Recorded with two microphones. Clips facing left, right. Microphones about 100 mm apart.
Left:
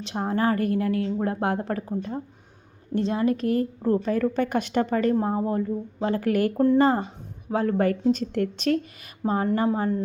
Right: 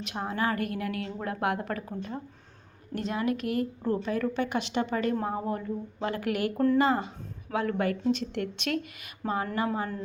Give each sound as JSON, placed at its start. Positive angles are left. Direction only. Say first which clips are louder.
{"t": 0.0, "sound": "a woman's voice", "louder": "left 5 dB", "side_deg": 35}
{"t": 5.2, "sound": "a woman's voice", "louder": "left 6 dB", "side_deg": 30}